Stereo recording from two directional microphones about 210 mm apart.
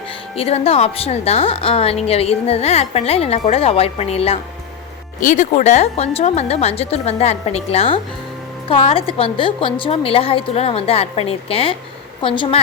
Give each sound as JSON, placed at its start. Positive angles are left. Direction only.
{"t": 0.3, "sound": "a woman's voice", "side_deg": 30}